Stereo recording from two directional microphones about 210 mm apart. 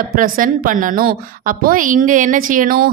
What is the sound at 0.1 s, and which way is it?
A woman's voice, 40° right (ahead or behind).